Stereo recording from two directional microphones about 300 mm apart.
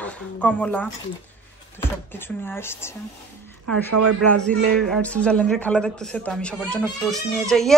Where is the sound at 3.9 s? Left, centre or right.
Right.